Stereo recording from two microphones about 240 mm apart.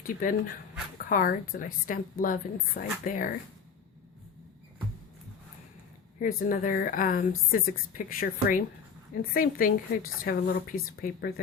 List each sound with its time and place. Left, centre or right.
0.0 s speech: left
6.1 s speech: left